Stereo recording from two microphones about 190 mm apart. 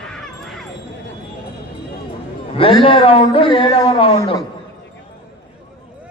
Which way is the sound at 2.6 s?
30° left (ahead or behind).